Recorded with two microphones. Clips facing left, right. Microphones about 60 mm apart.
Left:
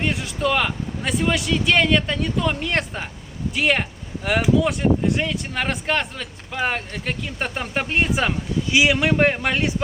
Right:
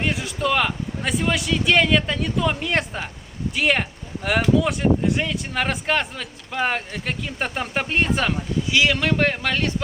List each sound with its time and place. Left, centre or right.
0.0 s speech: centre
8.7 s a man's voice: centre